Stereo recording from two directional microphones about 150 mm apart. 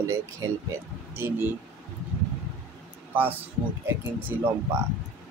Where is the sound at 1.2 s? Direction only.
15° right (ahead or behind).